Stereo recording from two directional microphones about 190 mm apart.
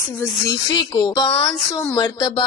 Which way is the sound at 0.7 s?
20° left (ahead or behind).